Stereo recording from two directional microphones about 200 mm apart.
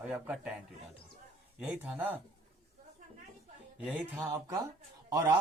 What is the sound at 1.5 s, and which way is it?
Speech, 10° right (ahead or behind).